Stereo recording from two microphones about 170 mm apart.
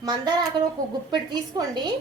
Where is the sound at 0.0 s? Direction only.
25° right (ahead or behind).